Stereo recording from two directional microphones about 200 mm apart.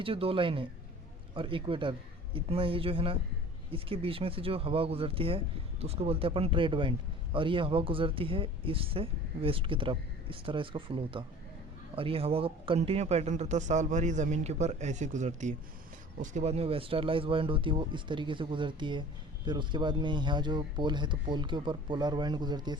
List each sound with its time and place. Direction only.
0.0 s speech: 25° right (ahead or behind)